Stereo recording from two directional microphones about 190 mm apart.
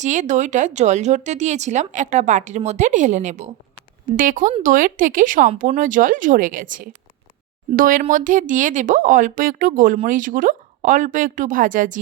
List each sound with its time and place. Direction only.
0.0 s speech: 40° right (ahead or behind)